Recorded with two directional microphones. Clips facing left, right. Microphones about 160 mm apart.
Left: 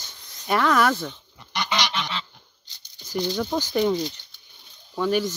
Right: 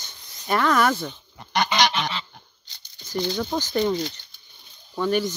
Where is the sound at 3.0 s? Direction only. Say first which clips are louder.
Even; 5° left (ahead or behind).